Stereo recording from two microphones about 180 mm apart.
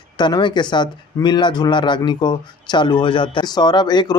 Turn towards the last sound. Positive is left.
turn(degrees=25)  # may be behind; listen again after turning